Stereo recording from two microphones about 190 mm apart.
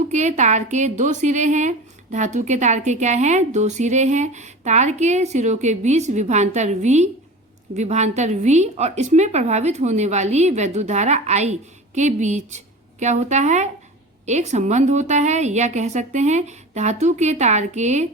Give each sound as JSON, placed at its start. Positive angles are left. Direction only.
{"t": 0.1, "sound": "a woman's voice", "side_deg": -40}